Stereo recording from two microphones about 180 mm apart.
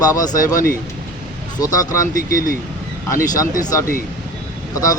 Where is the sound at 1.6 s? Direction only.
20° left (ahead or behind).